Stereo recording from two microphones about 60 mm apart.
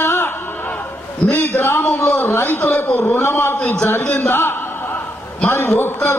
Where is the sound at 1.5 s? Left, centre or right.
Left.